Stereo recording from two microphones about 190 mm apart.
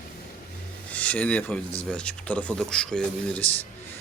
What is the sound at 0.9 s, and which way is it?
Speech, 5° left (ahead or behind).